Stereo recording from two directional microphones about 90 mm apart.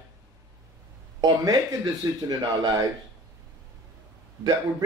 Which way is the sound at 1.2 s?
45° right (ahead or behind).